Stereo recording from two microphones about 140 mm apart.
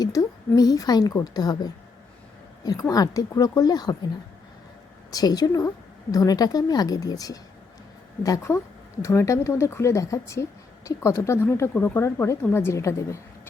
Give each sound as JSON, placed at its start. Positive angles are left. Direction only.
{"t": 0.0, "sound": "a woman's voice", "side_deg": 25}
{"t": 5.1, "sound": "speech", "side_deg": 30}